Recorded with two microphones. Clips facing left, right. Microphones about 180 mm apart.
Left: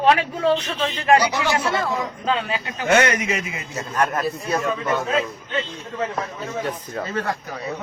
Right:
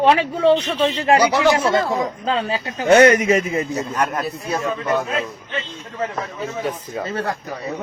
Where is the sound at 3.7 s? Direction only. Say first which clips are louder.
Right 2 dB; 15° right (ahead or behind).